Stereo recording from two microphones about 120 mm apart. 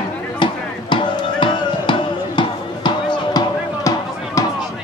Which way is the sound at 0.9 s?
45° left (ahead or behind).